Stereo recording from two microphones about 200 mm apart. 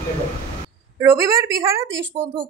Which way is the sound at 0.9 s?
15° right (ahead or behind).